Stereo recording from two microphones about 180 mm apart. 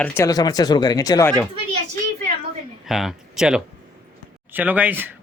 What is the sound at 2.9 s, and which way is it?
Speech, centre (ahead or behind).